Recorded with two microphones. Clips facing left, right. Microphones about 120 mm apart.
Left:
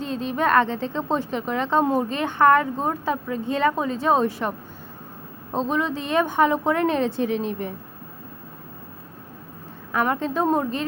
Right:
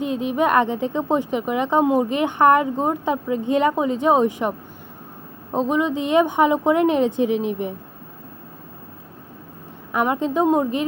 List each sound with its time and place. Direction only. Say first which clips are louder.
0.0 s a woman's voice: right 3 dB; 15° right (ahead or behind)
9.9 s a woman's voice: right 3 dB; 15° right (ahead or behind)